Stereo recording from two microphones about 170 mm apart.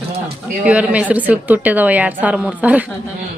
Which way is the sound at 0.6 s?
10° right (ahead or behind).